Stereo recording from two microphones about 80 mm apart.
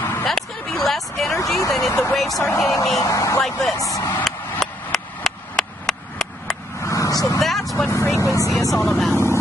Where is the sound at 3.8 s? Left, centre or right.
Left.